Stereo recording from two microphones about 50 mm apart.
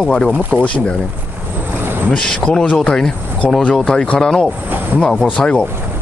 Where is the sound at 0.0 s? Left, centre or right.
Centre.